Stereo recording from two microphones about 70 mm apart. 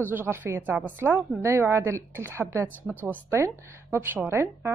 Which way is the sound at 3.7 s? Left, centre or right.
Right.